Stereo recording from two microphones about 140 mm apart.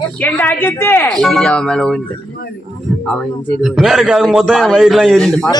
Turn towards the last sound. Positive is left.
turn(degrees=5)  # may be behind; listen again after turning